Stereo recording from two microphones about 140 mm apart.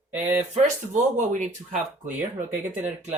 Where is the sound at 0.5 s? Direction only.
60° right (ahead or behind).